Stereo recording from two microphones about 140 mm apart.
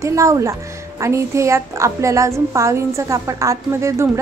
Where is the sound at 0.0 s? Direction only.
20° right (ahead or behind).